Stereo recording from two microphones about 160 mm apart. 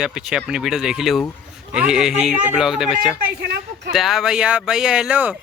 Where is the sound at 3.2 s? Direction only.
90° right.